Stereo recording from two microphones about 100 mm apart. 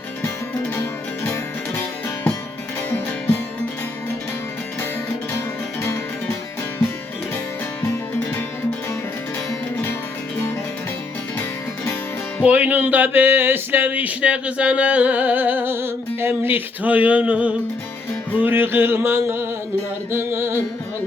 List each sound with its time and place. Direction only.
5.8 s music: 25° left (ahead or behind)
12.4 s music: 15° right (ahead or behind)
18.3 s a sound: 20° right (ahead or behind)
20.1 s music: 25° right (ahead or behind)